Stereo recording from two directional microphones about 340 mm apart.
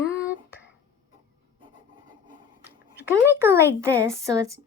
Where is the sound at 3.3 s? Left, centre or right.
Centre.